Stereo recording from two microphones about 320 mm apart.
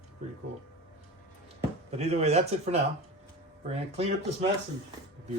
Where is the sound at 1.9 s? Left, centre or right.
Centre.